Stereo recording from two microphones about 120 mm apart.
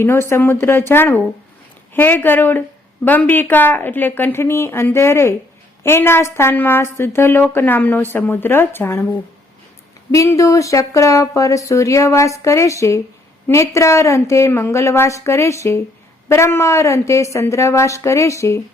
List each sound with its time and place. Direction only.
0.0 s a woman's voice: 20° left (ahead or behind)
10.1 s a woman's voice: 25° left (ahead or behind)